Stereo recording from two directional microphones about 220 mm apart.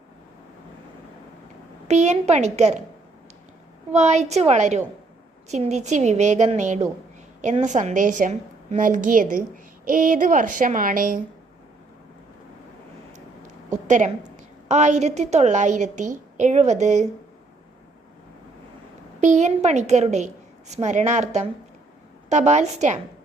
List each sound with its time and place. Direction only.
1.9 s a woman's voice: 30° right (ahead or behind)
3.9 s a woman's voice: 30° right (ahead or behind)
13.8 s a woman's voice: 35° right (ahead or behind)
19.2 s a woman's voice: 35° right (ahead or behind)